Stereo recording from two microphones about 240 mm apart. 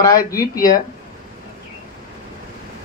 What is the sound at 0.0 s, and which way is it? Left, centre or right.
Speech, centre.